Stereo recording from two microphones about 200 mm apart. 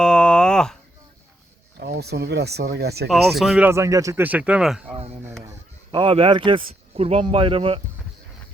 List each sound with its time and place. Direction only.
0.0 s a sound: 5° left (ahead or behind)
1.8 s speech: 55° right (ahead or behind)
3.1 s speech: centre (ahead or behind)
5.5 s a man's voice: 25° right (ahead or behind)